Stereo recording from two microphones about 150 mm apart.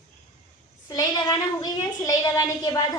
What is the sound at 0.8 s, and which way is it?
A woman's voice, 25° left (ahead or behind).